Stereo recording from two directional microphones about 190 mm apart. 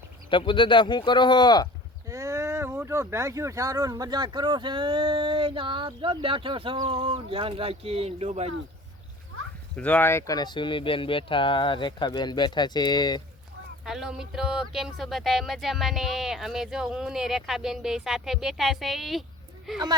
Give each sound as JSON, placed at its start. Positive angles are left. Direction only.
{"t": 0.3, "sound": "speech", "side_deg": 25}
{"t": 2.0, "sound": "speech", "side_deg": -15}
{"t": 9.7, "sound": "speech", "side_deg": 5}
{"t": 13.8, "sound": "speech", "side_deg": -5}